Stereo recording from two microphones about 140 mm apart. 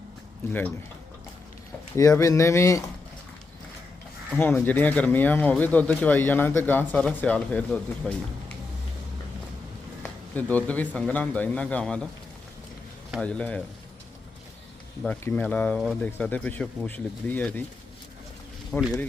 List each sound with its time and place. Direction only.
2.0 s speech: 25° left (ahead or behind)
4.4 s speech: 15° left (ahead or behind)
10.0 s speech: 10° left (ahead or behind)
13.1 s speech: 10° left (ahead or behind)
15.0 s speech: 10° left (ahead or behind)
18.7 s speech: 10° left (ahead or behind)